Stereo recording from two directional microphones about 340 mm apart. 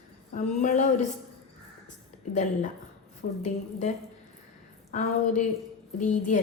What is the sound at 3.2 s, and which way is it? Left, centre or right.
Speech, left.